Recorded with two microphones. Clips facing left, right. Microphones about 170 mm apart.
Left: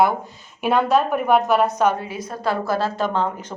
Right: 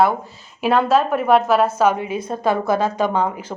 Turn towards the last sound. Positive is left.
turn(degrees=-15)  # may be behind; listen again after turning